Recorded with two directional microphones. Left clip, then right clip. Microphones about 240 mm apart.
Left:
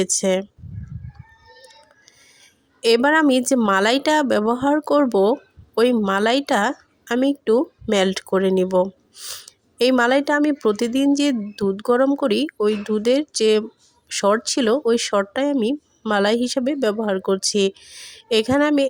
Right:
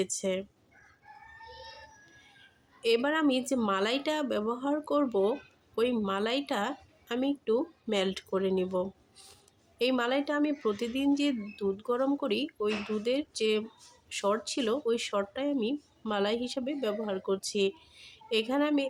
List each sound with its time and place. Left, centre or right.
0.0 s speech: left
2.8 s speech: left